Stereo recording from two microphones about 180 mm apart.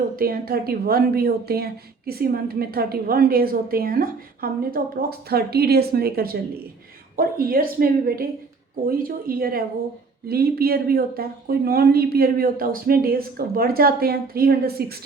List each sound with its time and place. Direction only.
0.2 s a woman's voice: 55° right (ahead or behind)